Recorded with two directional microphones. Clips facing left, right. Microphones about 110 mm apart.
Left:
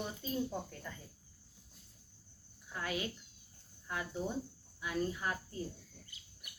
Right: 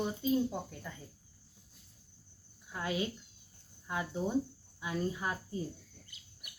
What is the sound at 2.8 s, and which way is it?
Speech, 25° right (ahead or behind).